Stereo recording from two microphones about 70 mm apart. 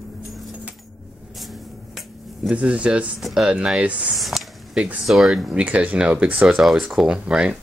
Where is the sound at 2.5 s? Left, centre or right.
Centre.